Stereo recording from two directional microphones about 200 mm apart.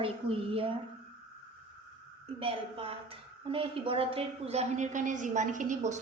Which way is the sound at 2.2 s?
30° right (ahead or behind).